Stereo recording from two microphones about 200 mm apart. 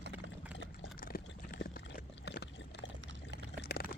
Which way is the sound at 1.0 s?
45° left (ahead or behind).